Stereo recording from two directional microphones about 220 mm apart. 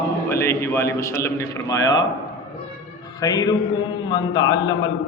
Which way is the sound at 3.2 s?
15° left (ahead or behind).